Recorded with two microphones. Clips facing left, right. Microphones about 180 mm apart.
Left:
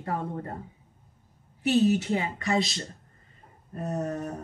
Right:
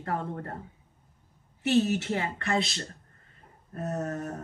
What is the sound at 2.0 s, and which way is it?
Speech, 15° left (ahead or behind).